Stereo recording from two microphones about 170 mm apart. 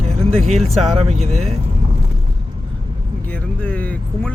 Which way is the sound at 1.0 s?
40° right (ahead or behind).